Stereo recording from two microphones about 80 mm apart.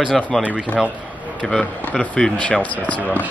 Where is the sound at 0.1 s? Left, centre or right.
Centre.